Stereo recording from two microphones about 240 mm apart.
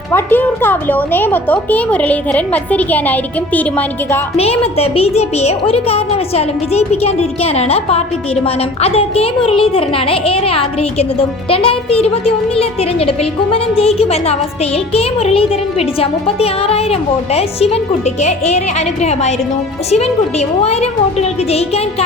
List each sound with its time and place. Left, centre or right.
0.1 s a woman's voice: centre
4.4 s a child's voice: left
20.6 s a child's voice: left